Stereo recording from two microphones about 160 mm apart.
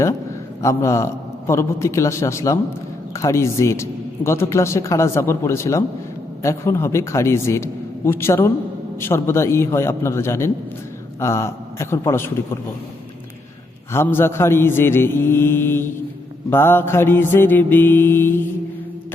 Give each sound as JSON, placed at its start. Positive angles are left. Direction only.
{"t": 0.6, "sound": "a man's voice", "side_deg": 20}
{"t": 13.9, "sound": "a man's voice", "side_deg": 15}